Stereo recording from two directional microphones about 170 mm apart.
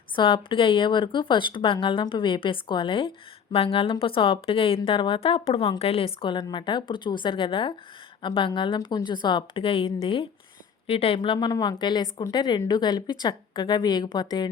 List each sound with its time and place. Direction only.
0.2 s a woman's voice: 30° left (ahead or behind)